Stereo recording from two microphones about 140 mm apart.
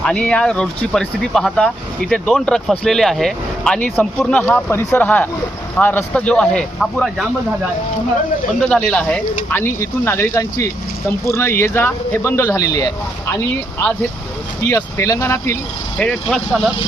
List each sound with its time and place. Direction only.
0.0 s speech: 5° left (ahead or behind)
8.7 s speech: 5° left (ahead or behind); by 12.9 s 25° left (ahead or behind)
13.3 s speech: 15° left (ahead or behind)
16.0 s speech: 5° left (ahead or behind)